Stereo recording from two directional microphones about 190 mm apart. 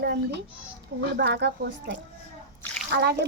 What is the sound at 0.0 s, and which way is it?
A child's voice, 60° right (ahead or behind).